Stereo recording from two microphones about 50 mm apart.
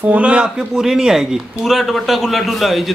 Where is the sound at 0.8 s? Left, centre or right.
Centre.